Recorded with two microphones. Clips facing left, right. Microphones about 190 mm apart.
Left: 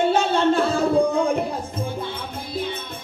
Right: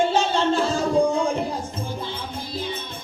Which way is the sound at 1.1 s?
60° left (ahead or behind).